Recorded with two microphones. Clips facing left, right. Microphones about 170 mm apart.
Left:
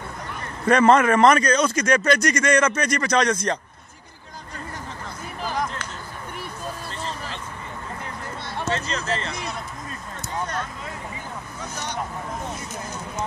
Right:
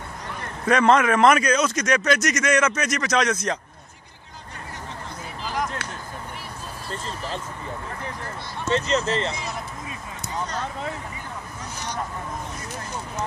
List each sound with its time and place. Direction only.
0.7 s speech: centre (ahead or behind)
8.7 s speech: 20° right (ahead or behind)